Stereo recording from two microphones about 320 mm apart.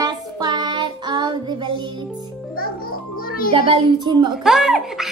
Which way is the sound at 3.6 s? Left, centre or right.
Centre.